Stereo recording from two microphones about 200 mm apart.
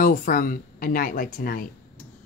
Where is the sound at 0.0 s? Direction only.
45° left (ahead or behind).